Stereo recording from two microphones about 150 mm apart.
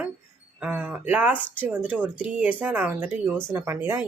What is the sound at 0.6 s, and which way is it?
Speech, 10° right (ahead or behind).